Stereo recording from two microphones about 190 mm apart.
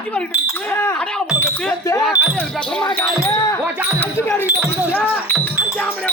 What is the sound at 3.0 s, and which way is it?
Speech, 20° left (ahead or behind).